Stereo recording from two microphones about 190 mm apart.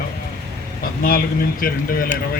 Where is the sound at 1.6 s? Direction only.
50° left (ahead or behind).